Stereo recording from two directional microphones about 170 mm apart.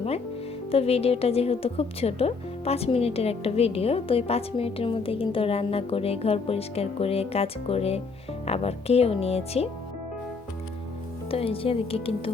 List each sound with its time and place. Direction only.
0.7 s a woman's voice: 35° left (ahead or behind)
11.3 s a woman's voice: 35° left (ahead or behind)